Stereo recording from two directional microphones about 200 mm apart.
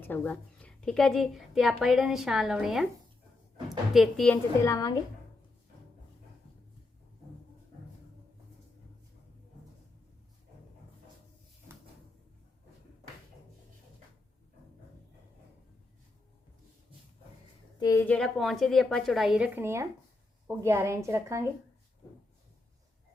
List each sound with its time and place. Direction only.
0.0 s a woman's voice: 10° left (ahead or behind)
3.9 s a woman's voice: centre (ahead or behind)
4.6 s a woman's voice: 15° left (ahead or behind)
17.7 s a woman's voice: 15° left (ahead or behind); by 21.4 s 15° right (ahead or behind)